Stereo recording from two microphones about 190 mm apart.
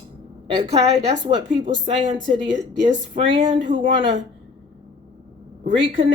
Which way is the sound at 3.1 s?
25° right (ahead or behind).